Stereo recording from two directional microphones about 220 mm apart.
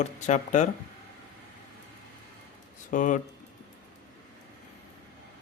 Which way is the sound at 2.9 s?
35° left (ahead or behind).